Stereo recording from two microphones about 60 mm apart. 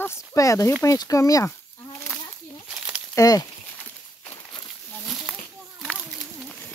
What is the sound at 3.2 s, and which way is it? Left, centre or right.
Speech, left.